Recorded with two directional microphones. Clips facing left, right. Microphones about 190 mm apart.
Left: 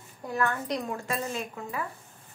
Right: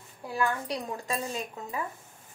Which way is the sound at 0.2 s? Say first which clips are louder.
Left 1 dB; 10° right (ahead or behind).